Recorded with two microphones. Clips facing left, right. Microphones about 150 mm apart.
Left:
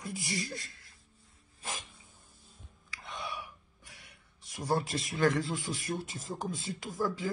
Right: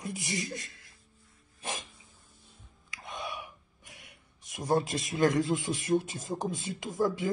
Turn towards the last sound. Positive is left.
turn(degrees=-20)  # may be behind; listen again after turning